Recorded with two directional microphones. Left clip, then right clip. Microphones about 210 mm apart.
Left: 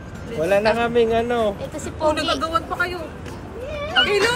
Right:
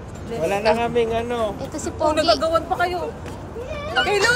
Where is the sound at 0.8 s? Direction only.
25° left (ahead or behind).